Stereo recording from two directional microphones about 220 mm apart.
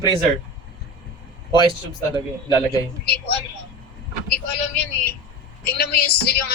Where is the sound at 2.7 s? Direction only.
45° left (ahead or behind).